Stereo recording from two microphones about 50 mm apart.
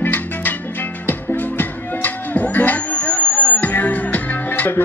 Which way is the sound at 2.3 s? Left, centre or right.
Left.